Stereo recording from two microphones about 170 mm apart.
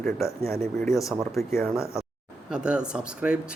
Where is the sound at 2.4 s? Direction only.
5° right (ahead or behind).